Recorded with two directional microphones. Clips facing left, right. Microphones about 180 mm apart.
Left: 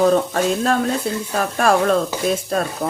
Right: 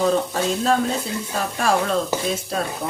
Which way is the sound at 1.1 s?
60° left (ahead or behind).